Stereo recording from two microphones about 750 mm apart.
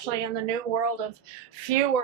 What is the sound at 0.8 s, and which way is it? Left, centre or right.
A woman's voice, right.